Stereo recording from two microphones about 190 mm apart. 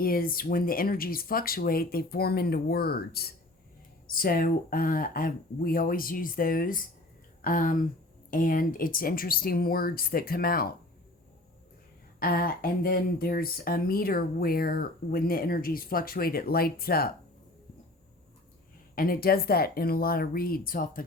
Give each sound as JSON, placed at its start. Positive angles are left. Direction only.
{"t": 0.0, "sound": "speech", "side_deg": 50}
{"t": 12.2, "sound": "speech", "side_deg": 50}
{"t": 18.9, "sound": "speech", "side_deg": 50}